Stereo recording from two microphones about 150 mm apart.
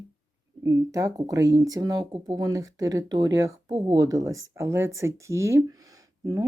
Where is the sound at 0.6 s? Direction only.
20° right (ahead or behind).